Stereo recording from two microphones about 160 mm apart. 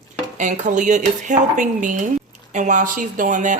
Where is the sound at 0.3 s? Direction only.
50° right (ahead or behind).